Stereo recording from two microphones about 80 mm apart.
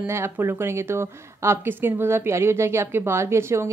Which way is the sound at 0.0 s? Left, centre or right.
Right.